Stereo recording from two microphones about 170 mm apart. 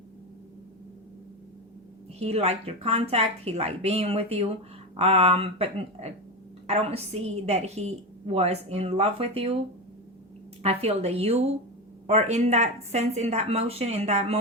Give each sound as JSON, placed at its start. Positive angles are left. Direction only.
{"t": 2.1, "sound": "a woman's voice", "side_deg": -40}
{"t": 10.6, "sound": "a woman's voice", "side_deg": -40}